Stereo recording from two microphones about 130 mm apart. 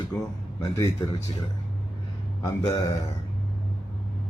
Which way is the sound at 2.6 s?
30° left (ahead or behind).